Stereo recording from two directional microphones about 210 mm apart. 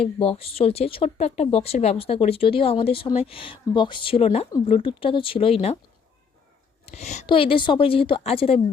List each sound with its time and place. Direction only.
0.0 s speech: 25° left (ahead or behind)
6.8 s speech: 30° left (ahead or behind)